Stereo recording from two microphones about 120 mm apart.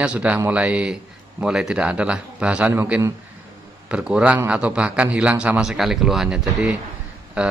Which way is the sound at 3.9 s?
10° right (ahead or behind).